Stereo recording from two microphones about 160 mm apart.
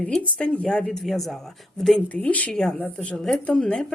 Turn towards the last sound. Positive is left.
turn(degrees=5)  # may be behind; listen again after turning